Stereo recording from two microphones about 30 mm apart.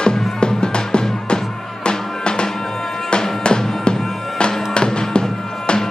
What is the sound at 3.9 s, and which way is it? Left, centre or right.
Bagpipes, left.